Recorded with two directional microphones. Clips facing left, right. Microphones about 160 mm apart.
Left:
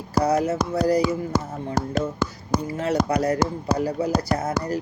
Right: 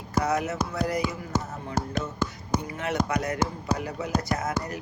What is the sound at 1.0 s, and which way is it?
Speech, 85° left.